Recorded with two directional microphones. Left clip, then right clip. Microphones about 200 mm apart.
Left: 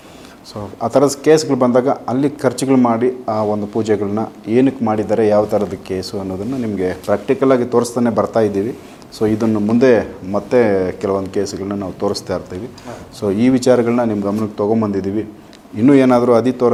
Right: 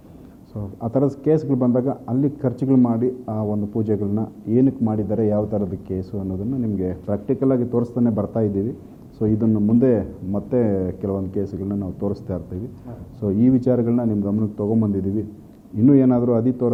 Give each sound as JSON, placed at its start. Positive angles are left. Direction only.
{"t": 0.5, "sound": "a man's voice", "side_deg": 25}
{"t": 1.0, "sound": "a man's voice", "side_deg": 5}
{"t": 8.4, "sound": "speech", "side_deg": 10}
{"t": 13.2, "sound": "speech", "side_deg": 10}
{"t": 14.6, "sound": "a man's voice", "side_deg": 20}